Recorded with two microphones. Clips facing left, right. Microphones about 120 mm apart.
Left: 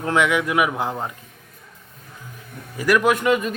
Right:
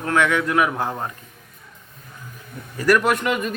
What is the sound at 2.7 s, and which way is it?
Speech, 10° left (ahead or behind).